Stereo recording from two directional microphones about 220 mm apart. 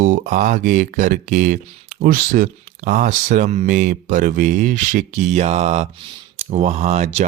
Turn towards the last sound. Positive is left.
turn(degrees=-30)  # may be behind; listen again after turning